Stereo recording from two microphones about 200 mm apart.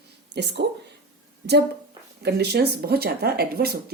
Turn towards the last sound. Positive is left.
turn(degrees=-50)  # may be behind; listen again after turning